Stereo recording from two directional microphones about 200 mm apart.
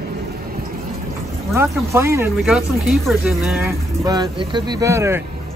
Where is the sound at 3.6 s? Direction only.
20° right (ahead or behind).